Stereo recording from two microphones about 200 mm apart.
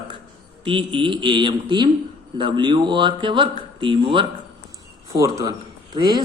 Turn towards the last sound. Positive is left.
turn(degrees=-20)  # may be behind; listen again after turning